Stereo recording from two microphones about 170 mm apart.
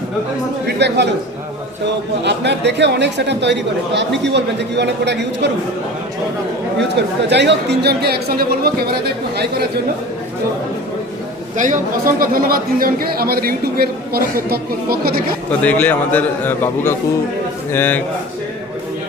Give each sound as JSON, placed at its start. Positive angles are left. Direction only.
{"t": 0.8, "sound": "speech", "side_deg": -90}
{"t": 2.2, "sound": "speech", "side_deg": -90}
{"t": 6.7, "sound": "speech", "side_deg": -90}
{"t": 11.5, "sound": "a man's voice", "side_deg": -50}
{"t": 15.6, "sound": "a man's voice", "side_deg": 10}